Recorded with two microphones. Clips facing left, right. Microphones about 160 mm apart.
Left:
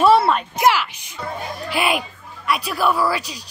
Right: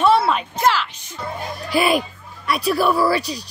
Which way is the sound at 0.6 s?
10° left (ahead or behind).